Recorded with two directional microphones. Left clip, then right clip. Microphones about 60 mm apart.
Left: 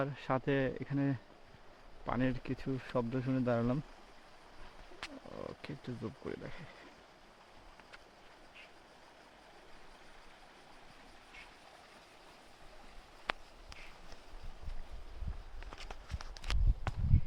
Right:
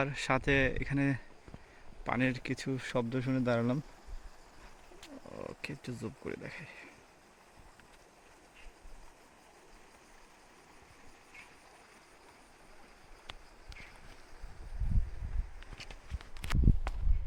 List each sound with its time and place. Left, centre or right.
0.0 s speech: right
2.0 s speech: right
5.3 s speech: right
5.6 s speech: right
6.2 s speech: right
13.3 s a sound: centre
16.9 s a sound: centre